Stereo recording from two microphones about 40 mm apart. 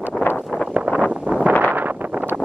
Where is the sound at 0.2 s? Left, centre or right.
Left.